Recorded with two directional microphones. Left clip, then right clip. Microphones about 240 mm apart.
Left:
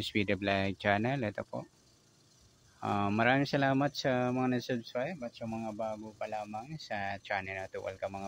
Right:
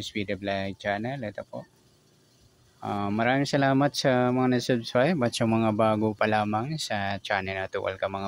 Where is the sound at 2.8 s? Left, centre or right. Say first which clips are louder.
Right 3 dB; centre.